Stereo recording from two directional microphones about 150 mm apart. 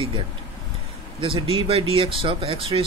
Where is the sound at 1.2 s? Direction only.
35° right (ahead or behind).